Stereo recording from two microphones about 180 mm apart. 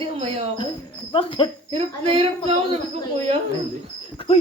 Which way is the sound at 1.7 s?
30° right (ahead or behind).